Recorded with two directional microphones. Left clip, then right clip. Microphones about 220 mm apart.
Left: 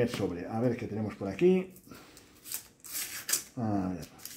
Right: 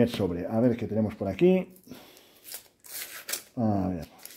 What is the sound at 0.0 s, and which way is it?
Speech, 45° right (ahead or behind).